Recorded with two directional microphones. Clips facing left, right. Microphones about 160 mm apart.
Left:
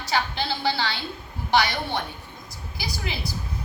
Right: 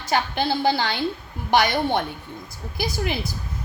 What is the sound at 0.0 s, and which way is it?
A woman's voice, 50° right (ahead or behind).